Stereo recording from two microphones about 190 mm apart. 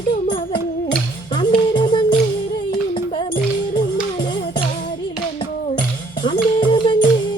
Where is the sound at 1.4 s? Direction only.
25° left (ahead or behind).